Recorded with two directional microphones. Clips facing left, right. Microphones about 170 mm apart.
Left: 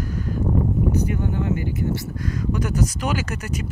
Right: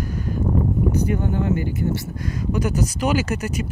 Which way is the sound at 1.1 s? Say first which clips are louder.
Right 2 dB; 40° right (ahead or behind).